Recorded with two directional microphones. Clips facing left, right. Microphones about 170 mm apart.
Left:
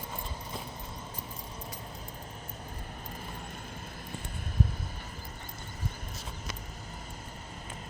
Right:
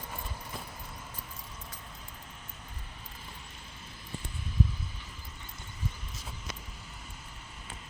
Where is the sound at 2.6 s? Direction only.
50° left (ahead or behind).